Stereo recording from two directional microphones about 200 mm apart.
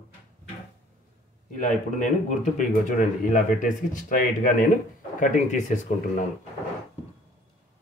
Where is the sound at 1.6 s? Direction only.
40° left (ahead or behind).